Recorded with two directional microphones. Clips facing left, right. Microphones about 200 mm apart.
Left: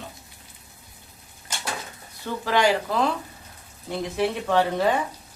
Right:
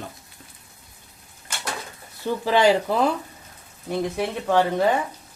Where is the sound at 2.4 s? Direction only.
15° right (ahead or behind).